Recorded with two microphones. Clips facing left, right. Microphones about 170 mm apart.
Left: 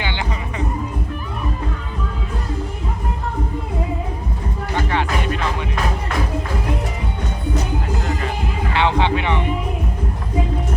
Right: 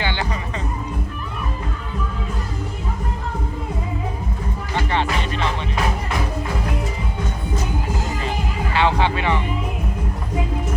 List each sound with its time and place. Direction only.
8.7 s music: 20° left (ahead or behind)